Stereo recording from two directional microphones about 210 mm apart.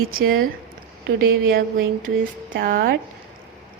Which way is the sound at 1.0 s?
45° right (ahead or behind).